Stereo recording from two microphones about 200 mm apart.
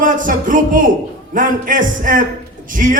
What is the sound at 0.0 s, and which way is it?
A man's voice, 40° right (ahead or behind).